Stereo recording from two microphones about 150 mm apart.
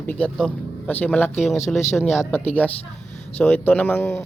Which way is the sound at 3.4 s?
10° left (ahead or behind).